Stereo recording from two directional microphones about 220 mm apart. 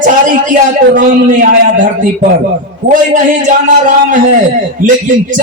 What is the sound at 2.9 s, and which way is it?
Speech, 35° right (ahead or behind).